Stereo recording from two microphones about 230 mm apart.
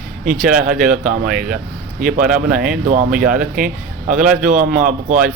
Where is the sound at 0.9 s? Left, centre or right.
Right.